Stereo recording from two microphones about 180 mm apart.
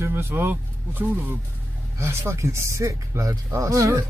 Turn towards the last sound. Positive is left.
turn(degrees=-20)  # may be behind; listen again after turning